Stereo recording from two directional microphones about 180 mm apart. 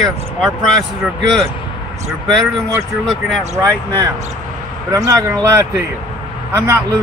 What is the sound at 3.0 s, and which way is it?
Speech, centre (ahead or behind).